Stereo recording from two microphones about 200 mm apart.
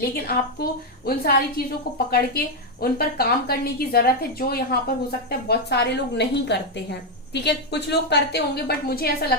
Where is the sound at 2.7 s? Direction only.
50° left (ahead or behind).